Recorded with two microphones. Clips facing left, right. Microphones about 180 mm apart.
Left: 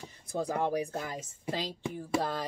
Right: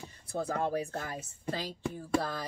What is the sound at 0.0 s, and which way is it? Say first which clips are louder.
Speech: left 1 dB; 15° left (ahead or behind).